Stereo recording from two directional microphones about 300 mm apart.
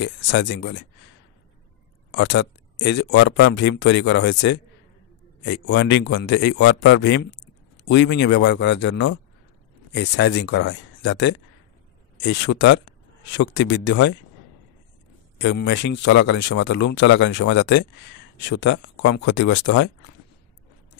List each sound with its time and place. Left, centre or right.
0.0 s speech: left
2.0 s speech: left
15.3 s speech: left